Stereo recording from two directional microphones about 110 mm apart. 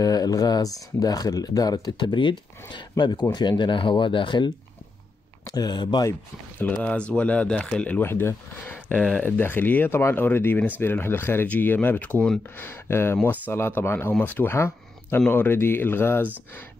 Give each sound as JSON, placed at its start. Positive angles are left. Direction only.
{"t": 0.0, "sound": "speech", "side_deg": 35}
{"t": 5.5, "sound": "speech", "side_deg": 40}
{"t": 6.6, "sound": "speech", "side_deg": 10}
{"t": 12.6, "sound": "speech", "side_deg": 20}